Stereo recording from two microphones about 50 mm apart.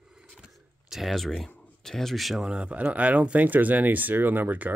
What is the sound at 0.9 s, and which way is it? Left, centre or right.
Speech, centre.